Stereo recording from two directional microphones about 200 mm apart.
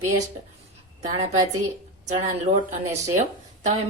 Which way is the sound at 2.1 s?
35° right (ahead or behind).